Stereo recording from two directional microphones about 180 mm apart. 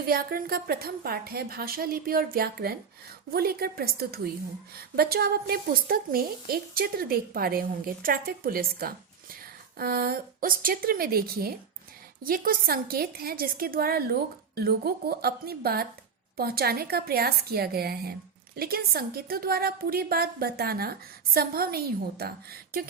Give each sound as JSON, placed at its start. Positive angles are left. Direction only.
{"t": 0.0, "sound": "a woman's voice", "side_deg": -55}